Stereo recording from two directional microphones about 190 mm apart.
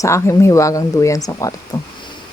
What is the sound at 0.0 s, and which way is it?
Speech, 15° left (ahead or behind).